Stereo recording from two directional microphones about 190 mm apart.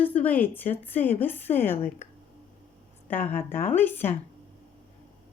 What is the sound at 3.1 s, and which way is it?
Speech, 10° left (ahead or behind).